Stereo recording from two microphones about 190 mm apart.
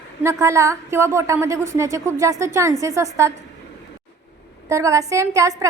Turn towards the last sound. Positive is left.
turn(degrees=-15)  # may be behind; listen again after turning